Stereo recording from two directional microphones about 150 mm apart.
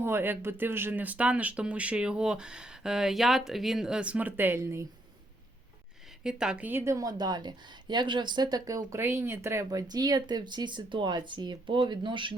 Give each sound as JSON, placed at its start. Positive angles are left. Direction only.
{"t": 0.0, "sound": "speech", "side_deg": -15}
{"t": 6.2, "sound": "a woman's voice", "side_deg": -5}